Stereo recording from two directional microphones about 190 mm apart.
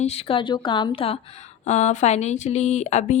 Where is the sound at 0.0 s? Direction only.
30° left (ahead or behind).